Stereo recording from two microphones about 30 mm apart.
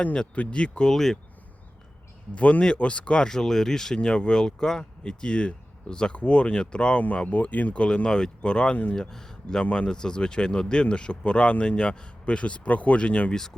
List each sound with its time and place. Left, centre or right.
0.5 s speech: left
0.9 s speech: centre
2.3 s speech: left
3.2 s speech: centre
4.0 s speech: left
4.8 s speech: left
7.3 s speech: left
7.7 s speech: left
8.0 s speech: left
8.7 s speech: left
9.0 s speech: centre; by 13.0 s left
13.0 s speech: left